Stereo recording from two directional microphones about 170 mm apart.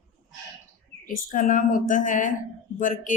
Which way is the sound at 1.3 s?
50° left (ahead or behind).